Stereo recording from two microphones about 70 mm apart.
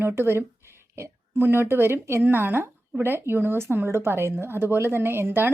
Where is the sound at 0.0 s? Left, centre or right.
Right.